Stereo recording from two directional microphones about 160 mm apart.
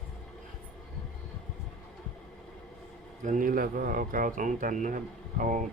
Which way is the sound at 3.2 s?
55° right (ahead or behind).